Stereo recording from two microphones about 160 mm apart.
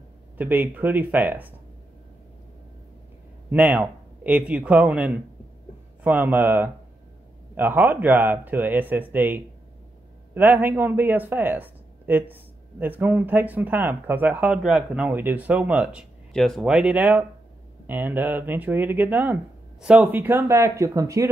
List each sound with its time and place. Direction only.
0.4 s a man's voice: 10° right (ahead or behind)
3.4 s a man's voice: 10° right (ahead or behind)